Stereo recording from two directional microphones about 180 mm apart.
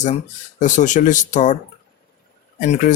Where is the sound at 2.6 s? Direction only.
45° left (ahead or behind).